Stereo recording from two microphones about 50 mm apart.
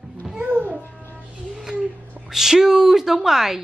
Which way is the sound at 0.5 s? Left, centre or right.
Right.